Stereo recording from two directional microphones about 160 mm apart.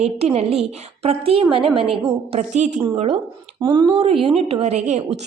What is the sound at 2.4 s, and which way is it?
Speech, 45° right (ahead or behind).